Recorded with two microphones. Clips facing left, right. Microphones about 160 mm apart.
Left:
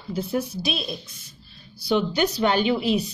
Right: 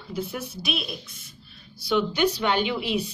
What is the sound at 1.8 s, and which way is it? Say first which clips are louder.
Speech: left 1 dB; 40° left (ahead or behind).